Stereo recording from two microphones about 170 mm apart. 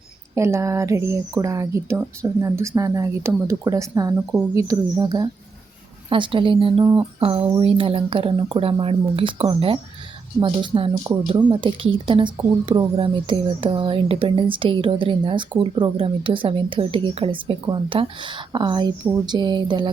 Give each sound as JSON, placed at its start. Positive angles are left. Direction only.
{"t": 0.3, "sound": "speech", "side_deg": -15}
{"t": 6.8, "sound": "speech", "side_deg": -20}
{"t": 7.2, "sound": "speech", "side_deg": -35}